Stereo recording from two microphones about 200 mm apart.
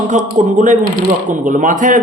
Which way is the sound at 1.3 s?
40° right (ahead or behind).